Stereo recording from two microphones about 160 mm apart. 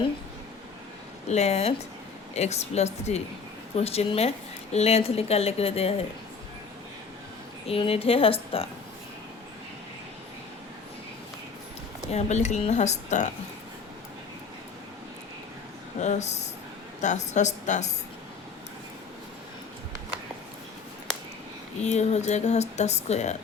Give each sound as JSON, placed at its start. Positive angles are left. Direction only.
{"t": 1.3, "sound": "speech", "side_deg": 45}
{"t": 7.7, "sound": "speech", "side_deg": 35}
{"t": 12.1, "sound": "speech", "side_deg": 45}
{"t": 16.0, "sound": "speech", "side_deg": 45}
{"t": 21.8, "sound": "speech", "side_deg": 45}